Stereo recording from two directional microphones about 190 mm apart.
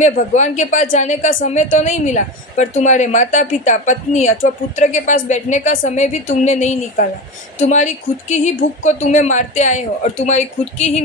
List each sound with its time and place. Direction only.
0.0 s a woman's voice: 40° left (ahead or behind)